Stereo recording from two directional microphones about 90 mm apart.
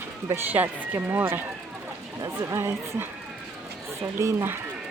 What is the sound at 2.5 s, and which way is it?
Speech, 30° right (ahead or behind).